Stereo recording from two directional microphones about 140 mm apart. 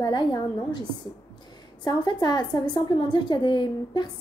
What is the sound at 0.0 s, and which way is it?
Speech, 30° left (ahead or behind).